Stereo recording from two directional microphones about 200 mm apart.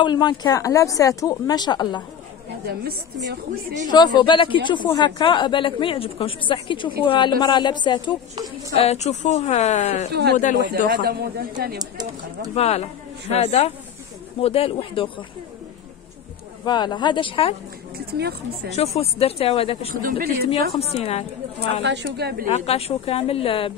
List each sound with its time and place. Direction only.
0.0 s speech: 20° left (ahead or behind)
2.6 s speech: 50° right (ahead or behind)
3.9 s a woman's voice: 20° left (ahead or behind)
10.7 s speech: 50° right (ahead or behind)
11.8 s speech: 20° right (ahead or behind)
12.5 s a woman's voice: 30° left (ahead or behind)
16.6 s speech: 20° left (ahead or behind)
17.9 s speech: 55° right (ahead or behind)
18.8 s speech: 30° left (ahead or behind)
19.9 s speech: 45° right (ahead or behind)
20.9 s a woman's voice: 30° left (ahead or behind)
21.8 s a woman's voice: 60° right (ahead or behind)
22.5 s speech: 30° left (ahead or behind)